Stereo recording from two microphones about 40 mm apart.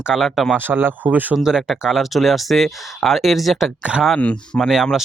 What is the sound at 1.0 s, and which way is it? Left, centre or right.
Speech, right.